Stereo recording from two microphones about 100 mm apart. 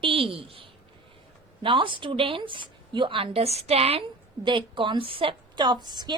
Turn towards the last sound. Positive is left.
turn(degrees=-45)  # may be behind; listen again after turning